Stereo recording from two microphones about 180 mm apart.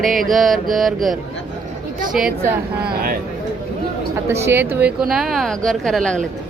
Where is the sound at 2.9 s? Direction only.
55° right (ahead or behind).